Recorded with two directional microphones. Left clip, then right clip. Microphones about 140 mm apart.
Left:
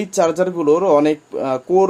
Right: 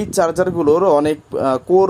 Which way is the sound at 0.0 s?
45° right (ahead or behind).